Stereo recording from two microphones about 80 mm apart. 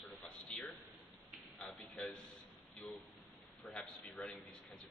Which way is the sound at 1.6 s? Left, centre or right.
Centre.